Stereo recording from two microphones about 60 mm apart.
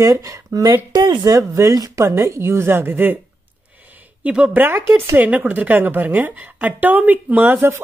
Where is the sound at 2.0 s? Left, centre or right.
Right.